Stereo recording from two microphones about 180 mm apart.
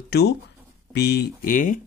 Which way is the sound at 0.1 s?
65° left (ahead or behind).